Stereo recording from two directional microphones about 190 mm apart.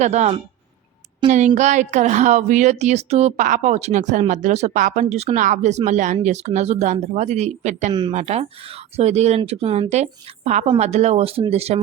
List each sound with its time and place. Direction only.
0.0 s a woman's voice: 35° right (ahead or behind)